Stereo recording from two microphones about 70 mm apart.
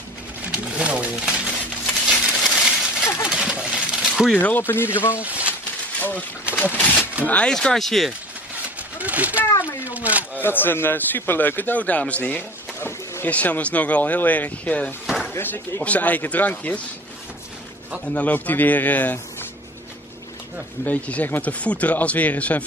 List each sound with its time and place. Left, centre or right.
0.4 s a sound: centre
4.4 s a man's voice: left
5.2 s speech: centre
5.9 s a man's voice: left
7.5 s speech: centre
8.6 s a sound: right
9.4 s a sound: left
9.8 s speech: right
10.3 s a man's voice: left
18.0 s a man's voice: left
20.8 s a man's voice: left